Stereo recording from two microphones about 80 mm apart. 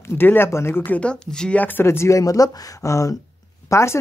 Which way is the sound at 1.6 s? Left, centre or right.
Left.